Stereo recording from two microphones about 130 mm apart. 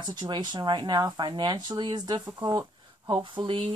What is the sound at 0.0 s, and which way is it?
Speech, 35° right (ahead or behind).